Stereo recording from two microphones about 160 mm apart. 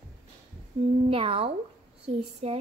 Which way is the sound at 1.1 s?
35° right (ahead or behind).